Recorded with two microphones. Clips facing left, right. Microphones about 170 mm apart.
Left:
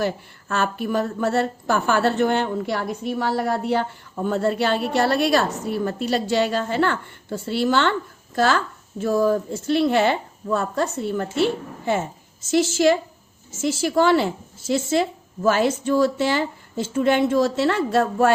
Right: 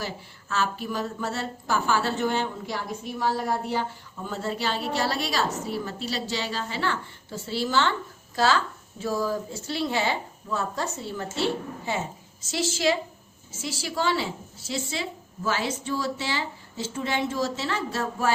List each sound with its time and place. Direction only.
0.0 s a woman's voice: 55° left (ahead or behind)
12.5 s a woman's voice: 50° left (ahead or behind)